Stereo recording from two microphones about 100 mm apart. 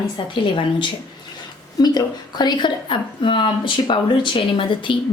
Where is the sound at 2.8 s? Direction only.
60° left (ahead or behind).